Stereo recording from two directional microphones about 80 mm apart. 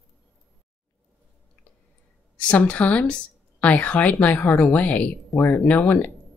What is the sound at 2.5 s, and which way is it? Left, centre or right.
Speech, centre.